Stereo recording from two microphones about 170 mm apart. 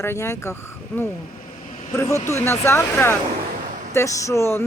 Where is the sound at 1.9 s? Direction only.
15° left (ahead or behind).